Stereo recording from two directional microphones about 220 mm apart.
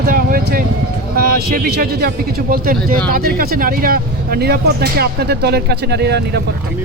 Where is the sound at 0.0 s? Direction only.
40° right (ahead or behind).